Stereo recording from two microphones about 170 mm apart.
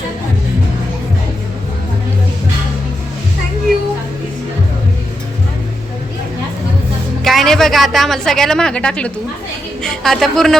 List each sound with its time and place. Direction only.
7.3 s a woman's voice: centre (ahead or behind)